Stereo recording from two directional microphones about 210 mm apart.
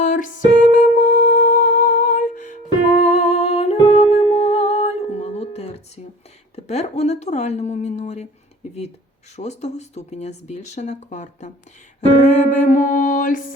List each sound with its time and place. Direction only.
0.0 s music: 35° left (ahead or behind)
6.7 s speech: 30° left (ahead or behind)
9.3 s speech: 30° left (ahead or behind)